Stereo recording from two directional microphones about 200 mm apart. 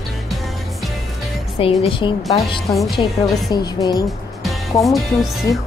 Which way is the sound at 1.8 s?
25° left (ahead or behind).